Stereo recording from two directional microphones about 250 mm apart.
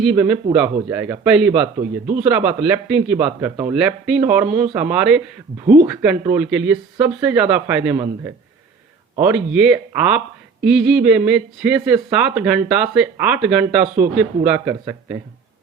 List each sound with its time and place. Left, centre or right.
0.0 s a man's voice: centre
9.1 s a man's voice: centre
13.8 s a man's voice: right
14.2 s a man's voice: centre